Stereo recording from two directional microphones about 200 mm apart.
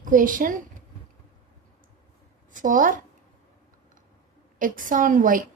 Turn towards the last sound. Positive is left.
turn(degrees=-40)  # may be behind; listen again after turning